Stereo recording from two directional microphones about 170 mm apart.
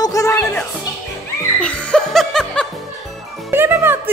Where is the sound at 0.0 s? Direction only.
20° left (ahead or behind); by 2.7 s 5° left (ahead or behind).